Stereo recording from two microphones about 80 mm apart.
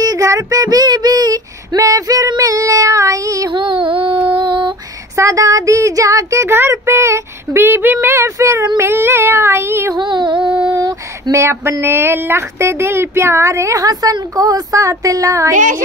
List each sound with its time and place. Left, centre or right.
0.0 s child singing: right
3.5 s a sound: right
4.5 s lullaby: right
5.1 s child singing: right
9.9 s a sound: right
10.7 s female singing: right
11.3 s speech: right